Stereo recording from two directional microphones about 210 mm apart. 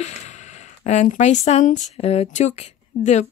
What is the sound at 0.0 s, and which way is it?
Speech, 35° left (ahead or behind).